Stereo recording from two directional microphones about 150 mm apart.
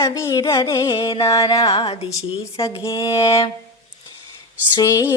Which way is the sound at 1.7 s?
40° left (ahead or behind).